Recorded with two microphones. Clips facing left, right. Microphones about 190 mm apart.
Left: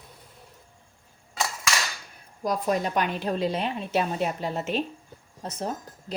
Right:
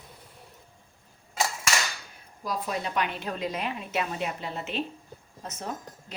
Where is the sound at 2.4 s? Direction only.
45° left (ahead or behind).